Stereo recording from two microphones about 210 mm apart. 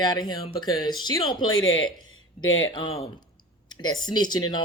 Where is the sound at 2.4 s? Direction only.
70° left (ahead or behind).